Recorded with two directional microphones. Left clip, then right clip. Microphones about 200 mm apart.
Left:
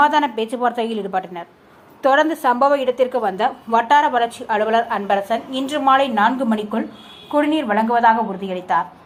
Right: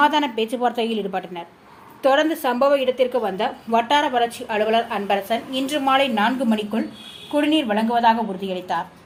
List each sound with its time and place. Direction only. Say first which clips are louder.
0.0 s a woman's voice: left 3 dB; 5° left (ahead or behind)